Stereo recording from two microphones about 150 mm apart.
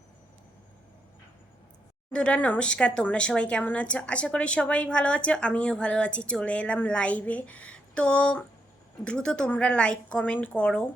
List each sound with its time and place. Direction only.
2.1 s speech: 10° left (ahead or behind)